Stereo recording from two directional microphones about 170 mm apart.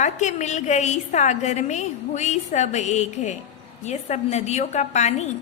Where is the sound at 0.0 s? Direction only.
45° left (ahead or behind).